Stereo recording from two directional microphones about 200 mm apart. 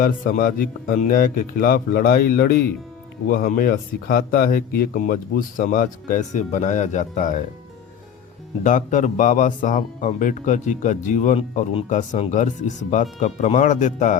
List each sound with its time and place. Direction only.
0.0 s a man's voice: 45° left (ahead or behind)
8.6 s speech: 40° left (ahead or behind)